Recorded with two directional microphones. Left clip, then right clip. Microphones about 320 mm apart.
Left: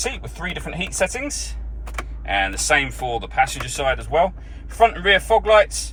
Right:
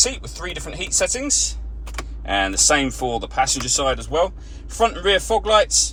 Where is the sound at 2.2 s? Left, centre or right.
Centre.